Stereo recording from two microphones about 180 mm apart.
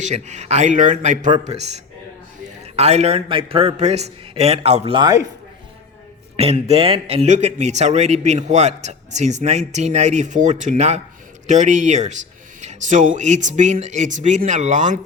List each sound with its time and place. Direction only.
0.0 s speech: 40° right (ahead or behind)
2.7 s speech: 35° right (ahead or behind)
4.9 s a man's voice: 20° right (ahead or behind)
6.3 s speech: 35° right (ahead or behind)